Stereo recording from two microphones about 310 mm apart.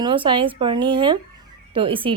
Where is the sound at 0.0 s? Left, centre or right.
Centre.